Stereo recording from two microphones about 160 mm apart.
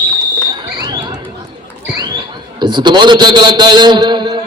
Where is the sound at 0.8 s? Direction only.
25° right (ahead or behind).